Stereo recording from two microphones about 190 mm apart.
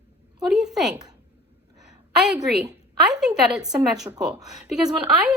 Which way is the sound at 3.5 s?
5° right (ahead or behind).